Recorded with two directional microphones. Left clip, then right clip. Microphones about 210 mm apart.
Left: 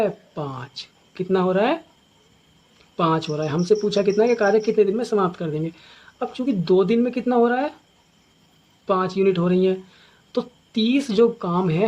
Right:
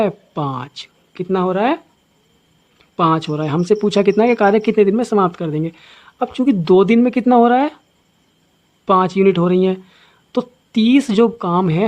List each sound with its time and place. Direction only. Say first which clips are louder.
0.0 s speech: right 5 dB; 40° right (ahead or behind)
2.9 s speech: right 5 dB; 40° right (ahead or behind)
8.9 s speech: right 7 dB; 40° right (ahead or behind)